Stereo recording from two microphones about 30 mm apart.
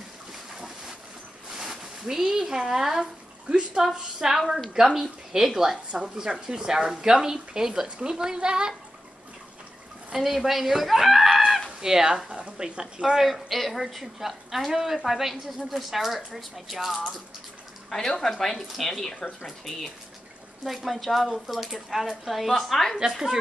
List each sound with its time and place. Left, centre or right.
1.5 s a sound: centre
2.7 s a woman's voice: centre
10.1 s speech: centre
11.8 s a woman's voice: centre
12.5 s a woman's voice: right
13.2 s a woman's voice: centre
17.8 s a woman's voice: centre
22.5 s speech: centre
22.9 s a woman's voice: centre